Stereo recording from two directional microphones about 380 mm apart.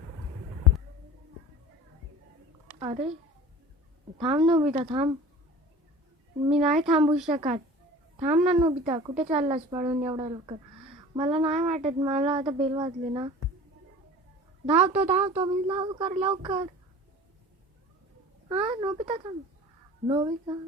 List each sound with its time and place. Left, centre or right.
2.7 s speech: centre
4.2 s a woman's voice: centre
6.4 s a woman's voice: centre
14.7 s a woman's voice: centre
18.4 s a woman's voice: centre